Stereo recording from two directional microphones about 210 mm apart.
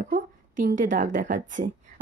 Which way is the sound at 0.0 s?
40° right (ahead or behind).